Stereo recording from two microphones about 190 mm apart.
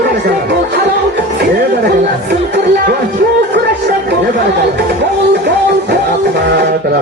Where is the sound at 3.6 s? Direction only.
60° right (ahead or behind).